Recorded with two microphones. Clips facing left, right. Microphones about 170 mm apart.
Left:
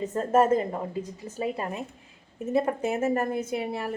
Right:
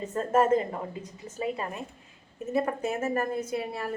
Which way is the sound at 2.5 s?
25° left (ahead or behind).